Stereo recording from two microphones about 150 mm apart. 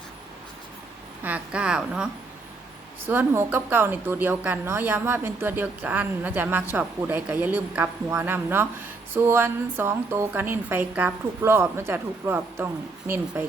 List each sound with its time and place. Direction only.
1.2 s speech: 10° right (ahead or behind)
3.1 s speech: 15° right (ahead or behind)